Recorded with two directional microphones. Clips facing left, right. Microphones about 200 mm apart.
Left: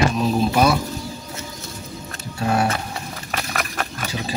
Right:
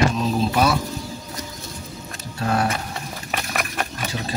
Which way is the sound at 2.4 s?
10° left (ahead or behind).